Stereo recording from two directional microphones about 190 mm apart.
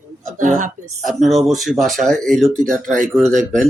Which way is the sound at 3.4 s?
40° right (ahead or behind).